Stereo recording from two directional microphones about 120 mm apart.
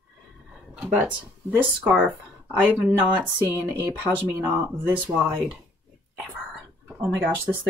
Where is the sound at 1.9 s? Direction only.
Centre (ahead or behind).